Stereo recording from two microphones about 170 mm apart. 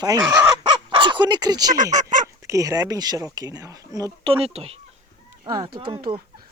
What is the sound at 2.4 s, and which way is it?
Speech, 20° right (ahead or behind).